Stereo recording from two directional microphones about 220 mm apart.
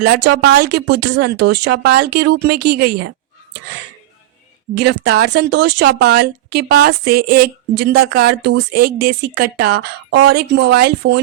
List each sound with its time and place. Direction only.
0.0 s speech: 50° right (ahead or behind)
4.7 s speech: 50° right (ahead or behind)